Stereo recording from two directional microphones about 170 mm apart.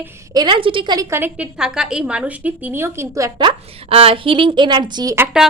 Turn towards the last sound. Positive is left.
turn(degrees=-20)  # may be behind; listen again after turning